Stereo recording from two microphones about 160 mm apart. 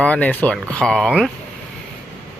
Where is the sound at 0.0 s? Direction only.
10° left (ahead or behind).